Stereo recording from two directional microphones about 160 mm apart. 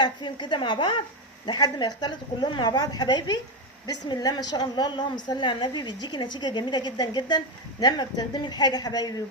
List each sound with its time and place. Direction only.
0.0 s a woman's voice: 30° left (ahead or behind)